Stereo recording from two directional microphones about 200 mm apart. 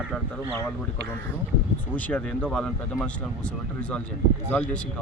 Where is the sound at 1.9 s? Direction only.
5° left (ahead or behind).